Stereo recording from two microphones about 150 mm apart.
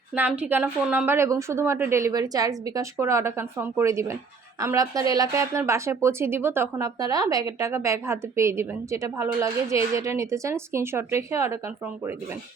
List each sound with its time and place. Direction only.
0.1 s a woman's voice: 5° right (ahead or behind)